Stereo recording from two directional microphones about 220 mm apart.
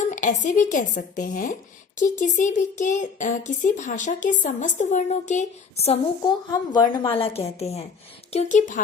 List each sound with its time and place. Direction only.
0.1 s a child's voice: 35° left (ahead or behind)